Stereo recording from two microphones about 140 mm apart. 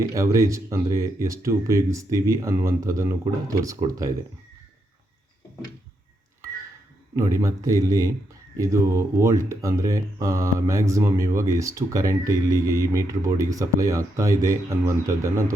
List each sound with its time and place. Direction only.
0.1 s speech: 20° right (ahead or behind)
7.2 s speech: 20° right (ahead or behind)